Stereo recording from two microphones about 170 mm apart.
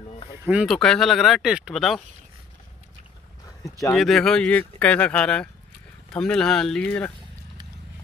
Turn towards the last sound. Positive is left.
turn(degrees=5)  # may be behind; listen again after turning